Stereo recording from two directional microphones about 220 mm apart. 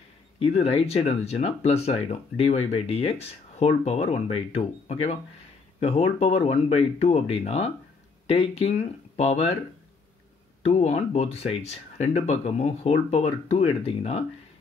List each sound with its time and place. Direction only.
0.4 s speech: 25° left (ahead or behind)
10.6 s speech: 30° left (ahead or behind)